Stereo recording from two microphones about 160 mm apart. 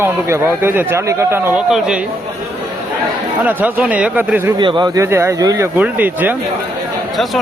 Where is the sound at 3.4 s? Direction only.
10° right (ahead or behind).